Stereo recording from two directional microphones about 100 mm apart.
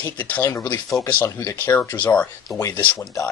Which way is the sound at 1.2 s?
30° left (ahead or behind).